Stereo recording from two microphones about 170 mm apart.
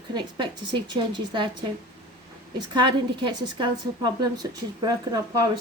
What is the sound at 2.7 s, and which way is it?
A woman's voice, 25° right (ahead or behind).